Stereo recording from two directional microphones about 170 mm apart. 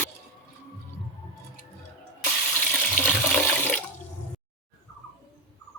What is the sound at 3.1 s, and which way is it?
Water, 10° left (ahead or behind).